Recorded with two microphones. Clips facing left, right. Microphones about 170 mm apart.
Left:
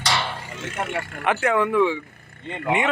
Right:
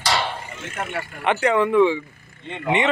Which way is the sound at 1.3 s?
Centre (ahead or behind).